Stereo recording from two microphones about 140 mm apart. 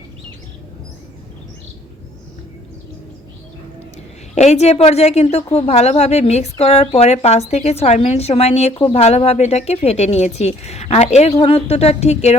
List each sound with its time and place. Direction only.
4.4 s a woman's voice: 50° left (ahead or behind)